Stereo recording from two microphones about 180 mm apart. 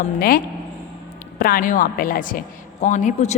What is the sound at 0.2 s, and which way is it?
A woman's voice, 55° left (ahead or behind).